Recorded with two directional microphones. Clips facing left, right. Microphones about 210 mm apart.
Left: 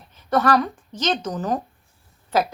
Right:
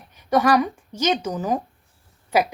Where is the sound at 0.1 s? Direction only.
10° right (ahead or behind).